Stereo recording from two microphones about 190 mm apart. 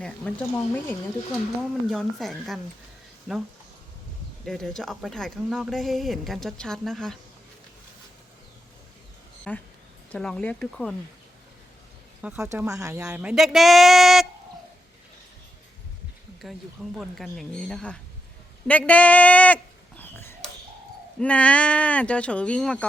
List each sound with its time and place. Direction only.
0.0 s speech: 10° left (ahead or behind)
4.4 s speech: 5° left (ahead or behind)
9.5 s speech: 10° left (ahead or behind)
12.5 s speech: 15° right (ahead or behind)
16.4 s speech: centre (ahead or behind)
20.0 s a sound: 10° left (ahead or behind)
21.2 s speech: 5° left (ahead or behind)